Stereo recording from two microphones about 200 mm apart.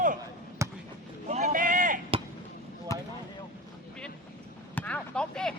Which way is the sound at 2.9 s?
15° left (ahead or behind).